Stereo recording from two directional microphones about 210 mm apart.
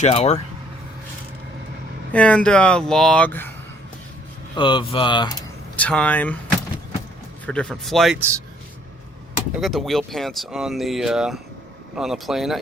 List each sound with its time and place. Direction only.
0.0 s speech: 30° left (ahead or behind)
2.1 s speech: 5° left (ahead or behind)
4.5 s speech: 25° left (ahead or behind)
5.7 s speech: 5° left (ahead or behind)
7.4 s speech: 5° left (ahead or behind)
9.6 s speech: centre (ahead or behind)